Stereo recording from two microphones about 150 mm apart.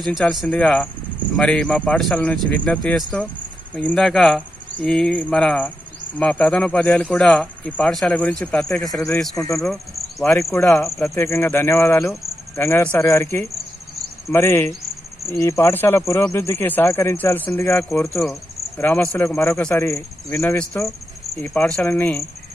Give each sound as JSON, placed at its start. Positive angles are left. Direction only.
{"t": 0.0, "sound": "speech", "side_deg": 0}
{"t": 18.3, "sound": "cricket", "side_deg": 10}
{"t": 19.1, "sound": "speech", "side_deg": 15}